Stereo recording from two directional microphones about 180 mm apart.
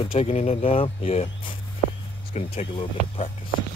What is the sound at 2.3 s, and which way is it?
Speech, 35° left (ahead or behind).